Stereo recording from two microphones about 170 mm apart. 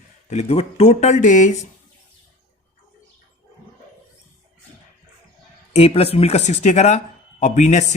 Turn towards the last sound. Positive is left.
turn(degrees=45)  # may be behind; listen again after turning